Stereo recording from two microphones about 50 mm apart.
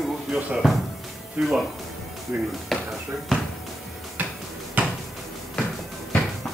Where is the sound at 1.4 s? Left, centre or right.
Right.